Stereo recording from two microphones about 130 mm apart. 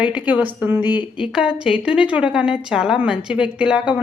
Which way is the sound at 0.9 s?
35° left (ahead or behind).